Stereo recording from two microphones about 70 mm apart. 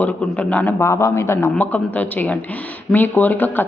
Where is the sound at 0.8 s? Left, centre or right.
Left.